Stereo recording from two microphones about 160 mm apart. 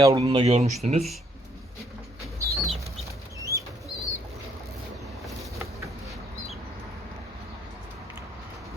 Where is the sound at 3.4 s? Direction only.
20° right (ahead or behind).